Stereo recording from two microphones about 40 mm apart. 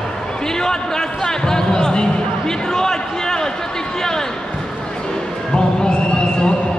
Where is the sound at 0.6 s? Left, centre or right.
Centre.